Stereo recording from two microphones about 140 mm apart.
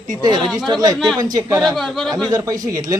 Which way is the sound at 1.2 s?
25° right (ahead or behind).